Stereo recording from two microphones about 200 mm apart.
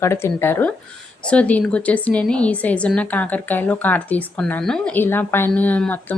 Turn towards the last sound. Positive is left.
turn(degrees=5)  # may be behind; listen again after turning